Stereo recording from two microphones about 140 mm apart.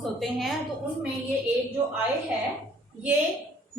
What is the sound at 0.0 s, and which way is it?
Speech, centre (ahead or behind).